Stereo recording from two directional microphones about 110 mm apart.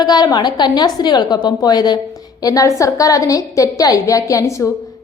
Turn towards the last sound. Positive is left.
turn(degrees=30)  # may be behind; listen again after turning